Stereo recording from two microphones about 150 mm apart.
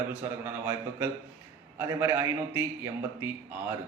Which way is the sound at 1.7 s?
20° right (ahead or behind).